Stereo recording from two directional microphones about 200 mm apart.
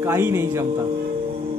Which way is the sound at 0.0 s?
15° right (ahead or behind).